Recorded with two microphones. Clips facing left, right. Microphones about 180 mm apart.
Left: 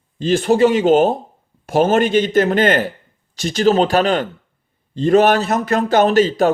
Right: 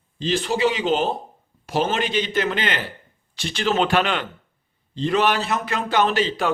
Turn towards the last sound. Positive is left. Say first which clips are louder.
# left 8 dB
turn(degrees=45)  # may be behind; listen again after turning